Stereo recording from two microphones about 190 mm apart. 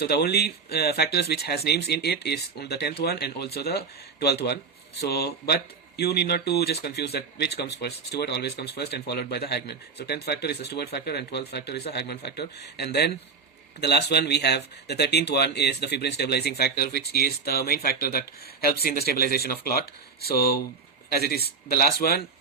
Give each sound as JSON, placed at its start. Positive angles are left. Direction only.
{"t": 0.0, "sound": "speech", "side_deg": 55}